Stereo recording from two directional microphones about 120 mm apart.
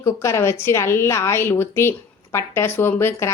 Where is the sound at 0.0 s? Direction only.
25° left (ahead or behind).